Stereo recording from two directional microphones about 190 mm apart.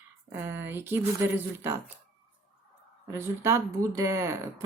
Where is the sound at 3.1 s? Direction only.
15° right (ahead or behind).